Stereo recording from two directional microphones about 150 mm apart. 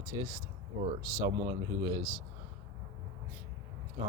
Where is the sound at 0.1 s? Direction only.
30° right (ahead or behind).